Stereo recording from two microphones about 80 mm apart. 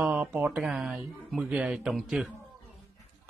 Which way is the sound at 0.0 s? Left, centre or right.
Centre.